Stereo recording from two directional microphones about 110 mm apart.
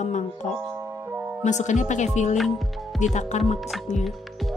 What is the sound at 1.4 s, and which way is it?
Speech, 90° left.